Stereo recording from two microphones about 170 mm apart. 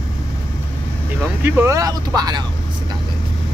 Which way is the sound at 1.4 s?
15° right (ahead or behind).